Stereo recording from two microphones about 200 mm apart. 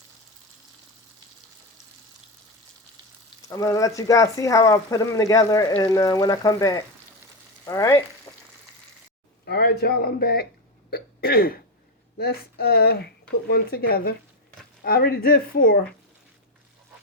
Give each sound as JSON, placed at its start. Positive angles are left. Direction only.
{"t": 3.5, "sound": "speech", "side_deg": 15}
{"t": 7.6, "sound": "frying", "side_deg": 15}
{"t": 9.5, "sound": "speech", "side_deg": 55}
{"t": 10.9, "sound": "throat clearing", "side_deg": 50}
{"t": 12.1, "sound": "speech", "side_deg": 50}